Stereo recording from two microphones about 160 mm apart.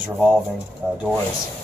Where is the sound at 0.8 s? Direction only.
10° right (ahead or behind).